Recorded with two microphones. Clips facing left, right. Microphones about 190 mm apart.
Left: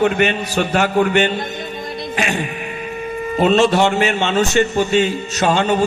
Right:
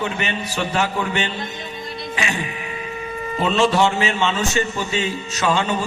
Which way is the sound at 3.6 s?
60° left (ahead or behind).